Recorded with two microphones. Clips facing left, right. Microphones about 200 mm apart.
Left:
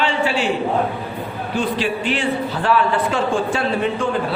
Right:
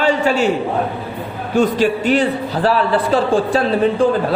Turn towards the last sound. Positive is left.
turn(degrees=-35)  # may be behind; listen again after turning